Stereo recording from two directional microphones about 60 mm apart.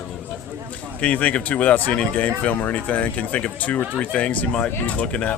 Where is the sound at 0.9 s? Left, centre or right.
Left.